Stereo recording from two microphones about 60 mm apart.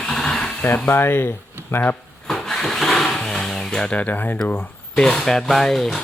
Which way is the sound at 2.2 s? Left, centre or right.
Centre.